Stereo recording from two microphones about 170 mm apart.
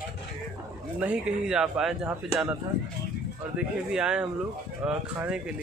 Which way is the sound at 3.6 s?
5° right (ahead or behind).